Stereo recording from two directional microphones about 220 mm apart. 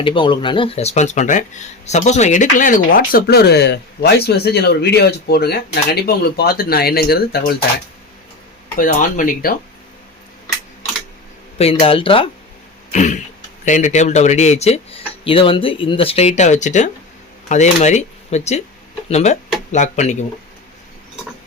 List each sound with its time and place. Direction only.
0.0 s speech: 20° left (ahead or behind); by 7.5 s 45° left (ahead or behind)
8.8 s speech: 35° left (ahead or behind)
11.5 s speech: 25° left (ahead or behind)